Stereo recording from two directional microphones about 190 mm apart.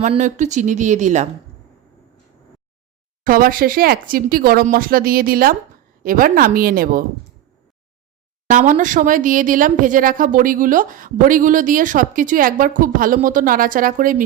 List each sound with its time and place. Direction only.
0.2 s a woman's voice: 40° right (ahead or behind)
3.2 s speech: 50° right (ahead or behind)
8.4 s speech: 45° right (ahead or behind)